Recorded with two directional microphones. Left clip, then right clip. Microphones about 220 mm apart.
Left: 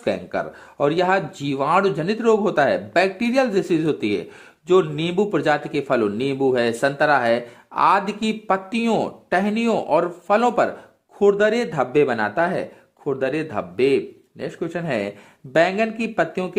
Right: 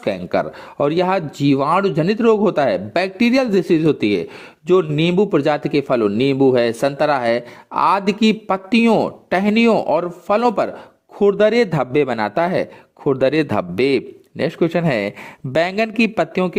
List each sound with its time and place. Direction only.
0.0 s a man's voice: 35° right (ahead or behind)